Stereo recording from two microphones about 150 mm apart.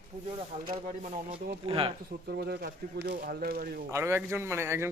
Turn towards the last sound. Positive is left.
turn(degrees=-15)  # may be behind; listen again after turning